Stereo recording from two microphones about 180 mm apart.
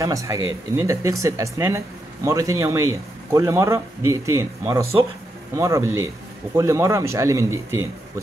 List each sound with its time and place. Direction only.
0.0 s speech: 20° right (ahead or behind)